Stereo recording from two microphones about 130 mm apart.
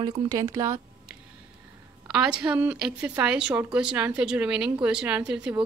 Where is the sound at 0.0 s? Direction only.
40° right (ahead or behind).